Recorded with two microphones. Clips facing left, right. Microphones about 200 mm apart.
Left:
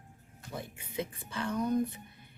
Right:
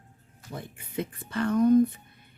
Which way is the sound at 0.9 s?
60° right (ahead or behind).